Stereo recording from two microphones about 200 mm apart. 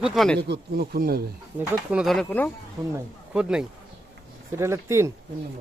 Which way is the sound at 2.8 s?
15° right (ahead or behind).